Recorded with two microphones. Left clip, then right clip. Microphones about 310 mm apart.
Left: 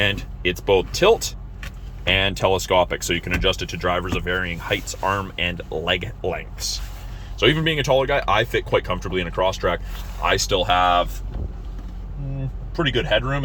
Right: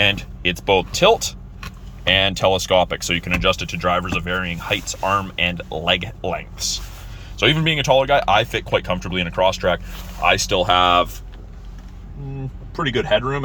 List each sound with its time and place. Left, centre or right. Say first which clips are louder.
0.0 s speech: right 3 dB; centre
10.7 s speech: right 3 dB; right